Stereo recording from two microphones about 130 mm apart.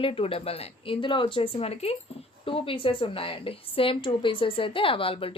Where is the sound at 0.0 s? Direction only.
45° left (ahead or behind).